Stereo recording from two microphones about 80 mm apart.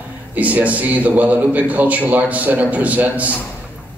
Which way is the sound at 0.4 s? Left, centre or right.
Centre.